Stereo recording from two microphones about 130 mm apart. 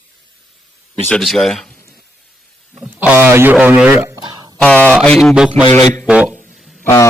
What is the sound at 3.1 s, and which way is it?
Speech, 20° right (ahead or behind).